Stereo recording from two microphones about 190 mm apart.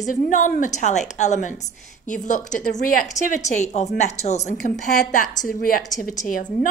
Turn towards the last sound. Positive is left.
turn(degrees=45)  # may be behind; listen again after turning